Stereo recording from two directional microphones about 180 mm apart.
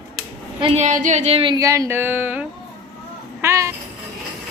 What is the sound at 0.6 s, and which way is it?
Speech, 35° right (ahead or behind).